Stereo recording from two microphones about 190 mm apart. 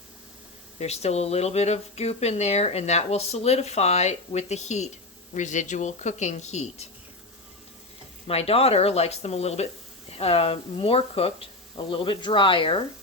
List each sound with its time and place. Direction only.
0.8 s speech: 35° left (ahead or behind)
8.3 s speech: 30° left (ahead or behind)